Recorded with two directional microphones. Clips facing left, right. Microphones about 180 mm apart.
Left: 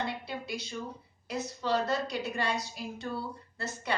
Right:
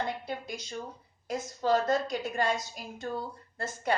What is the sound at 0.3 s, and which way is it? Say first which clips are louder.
A woman's voice: even; 45° right (ahead or behind).